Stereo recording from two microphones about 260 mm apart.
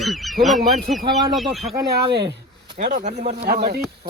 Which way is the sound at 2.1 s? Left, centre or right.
Right.